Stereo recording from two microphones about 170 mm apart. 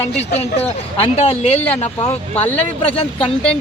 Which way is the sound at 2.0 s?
10° left (ahead or behind).